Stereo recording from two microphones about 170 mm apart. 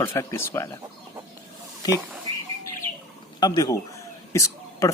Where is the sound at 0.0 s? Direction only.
15° left (ahead or behind).